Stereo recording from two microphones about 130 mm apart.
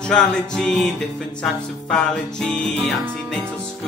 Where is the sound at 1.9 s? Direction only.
5° left (ahead or behind).